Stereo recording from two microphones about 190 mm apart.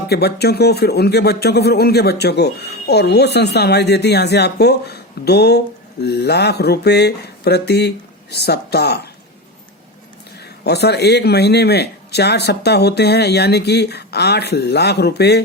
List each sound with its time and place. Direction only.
0.1 s speech: 55° left (ahead or behind)
10.6 s speech: 60° left (ahead or behind)